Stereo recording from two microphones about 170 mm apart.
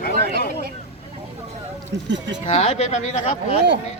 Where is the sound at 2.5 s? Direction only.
40° left (ahead or behind).